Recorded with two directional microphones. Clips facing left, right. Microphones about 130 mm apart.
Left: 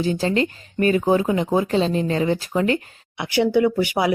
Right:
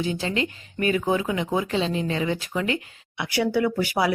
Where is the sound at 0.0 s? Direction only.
40° left (ahead or behind).